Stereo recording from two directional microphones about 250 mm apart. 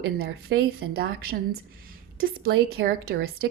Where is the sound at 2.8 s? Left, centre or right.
Right.